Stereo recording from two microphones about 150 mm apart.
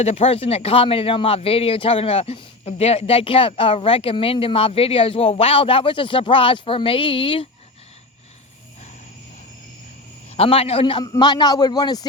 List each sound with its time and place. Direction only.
0.0 s speech: 40° left (ahead or behind)
10.3 s a man's voice: 40° left (ahead or behind)